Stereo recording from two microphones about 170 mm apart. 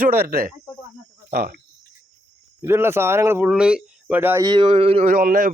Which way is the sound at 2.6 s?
15° right (ahead or behind).